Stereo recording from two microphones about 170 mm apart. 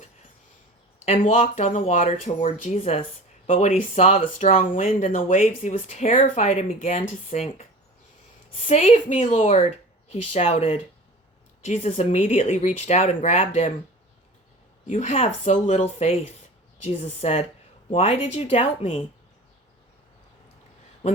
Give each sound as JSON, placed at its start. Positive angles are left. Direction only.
{"t": 1.0, "sound": "speech", "side_deg": 45}
{"t": 6.7, "sound": "speech", "side_deg": 50}
{"t": 8.6, "sound": "a woman's voice", "side_deg": 45}
{"t": 14.8, "sound": "a woman's voice", "side_deg": 45}